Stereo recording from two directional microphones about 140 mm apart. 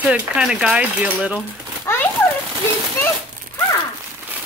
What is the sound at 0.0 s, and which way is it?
Speech, 10° right (ahead or behind).